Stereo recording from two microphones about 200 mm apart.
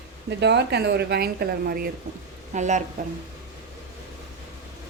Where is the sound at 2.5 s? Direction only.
35° right (ahead or behind).